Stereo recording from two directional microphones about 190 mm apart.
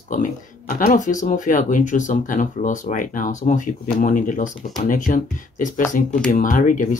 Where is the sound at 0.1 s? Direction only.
45° left (ahead or behind).